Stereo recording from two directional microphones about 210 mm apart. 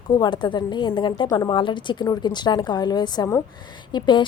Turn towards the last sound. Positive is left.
turn(degrees=20)  # may be behind; listen again after turning